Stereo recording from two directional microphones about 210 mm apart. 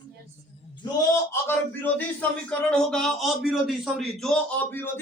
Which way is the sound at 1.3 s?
10° left (ahead or behind).